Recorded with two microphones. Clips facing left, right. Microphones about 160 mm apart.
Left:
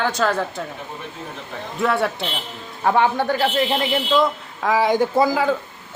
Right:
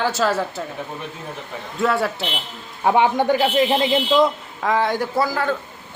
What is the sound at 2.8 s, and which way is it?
A man's voice, 15° right (ahead or behind).